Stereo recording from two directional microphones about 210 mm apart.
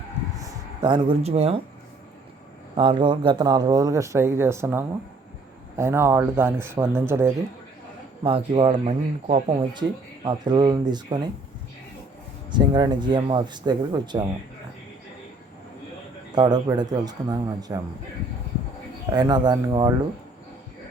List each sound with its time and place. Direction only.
0.3 s speech: 20° right (ahead or behind)
2.7 s speech: 25° right (ahead or behind)
8.2 s speech: 25° right (ahead or behind)
10.2 s speech: 20° right (ahead or behind)
12.5 s speech: 20° right (ahead or behind)
16.3 s speech: 20° right (ahead or behind)
19.1 s speech: 20° right (ahead or behind)